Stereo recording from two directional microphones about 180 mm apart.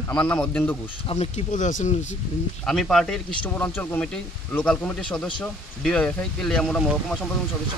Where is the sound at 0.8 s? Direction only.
35° left (ahead or behind).